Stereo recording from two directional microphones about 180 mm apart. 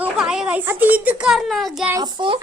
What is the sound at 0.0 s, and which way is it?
A child's voice, 5° right (ahead or behind).